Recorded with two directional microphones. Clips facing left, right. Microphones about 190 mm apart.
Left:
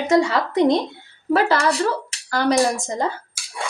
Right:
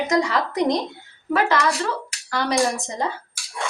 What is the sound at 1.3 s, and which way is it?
Speech, 40° left (ahead or behind).